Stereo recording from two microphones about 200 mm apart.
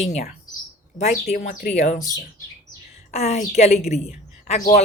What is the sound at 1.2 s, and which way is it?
Speech, 45° left (ahead or behind).